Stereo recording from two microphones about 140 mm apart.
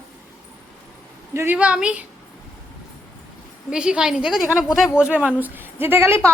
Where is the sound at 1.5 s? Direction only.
10° right (ahead or behind).